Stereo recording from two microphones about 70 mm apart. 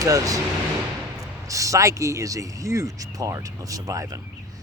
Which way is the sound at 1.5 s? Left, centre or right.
Right.